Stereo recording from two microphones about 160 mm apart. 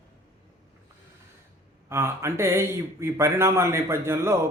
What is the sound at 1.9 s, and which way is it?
A man's voice, 15° right (ahead or behind).